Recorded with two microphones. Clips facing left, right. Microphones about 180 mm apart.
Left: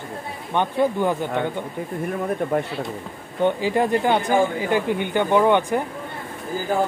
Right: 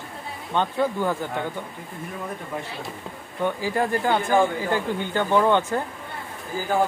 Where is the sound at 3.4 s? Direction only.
20° left (ahead or behind).